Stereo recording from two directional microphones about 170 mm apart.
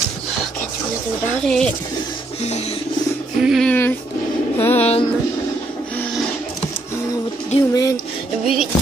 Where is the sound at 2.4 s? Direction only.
40° left (ahead or behind).